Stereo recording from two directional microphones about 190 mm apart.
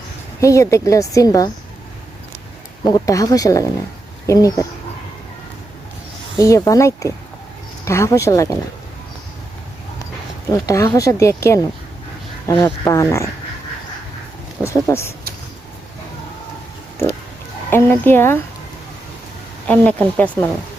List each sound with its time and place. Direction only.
0.3 s speech: 15° left (ahead or behind)
2.8 s speech: 20° left (ahead or behind)
6.3 s speech: 15° left (ahead or behind)
10.5 s speech: 15° left (ahead or behind)
14.6 s a sound: 15° left (ahead or behind)
17.7 s speech: 10° left (ahead or behind)
19.6 s speech: 5° left (ahead or behind)